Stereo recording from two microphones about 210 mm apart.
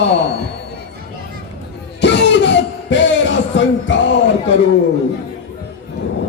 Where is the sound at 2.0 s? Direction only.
55° left (ahead or behind).